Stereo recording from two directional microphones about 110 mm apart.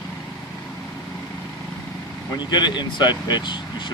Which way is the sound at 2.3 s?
40° left (ahead or behind).